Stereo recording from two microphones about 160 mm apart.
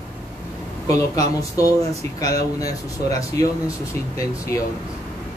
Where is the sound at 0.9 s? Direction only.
20° left (ahead or behind).